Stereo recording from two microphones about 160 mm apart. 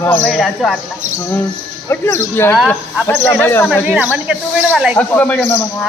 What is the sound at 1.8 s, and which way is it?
Speech, 15° left (ahead or behind).